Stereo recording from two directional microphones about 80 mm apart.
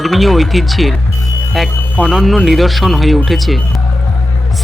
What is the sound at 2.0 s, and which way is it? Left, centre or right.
Speech, centre.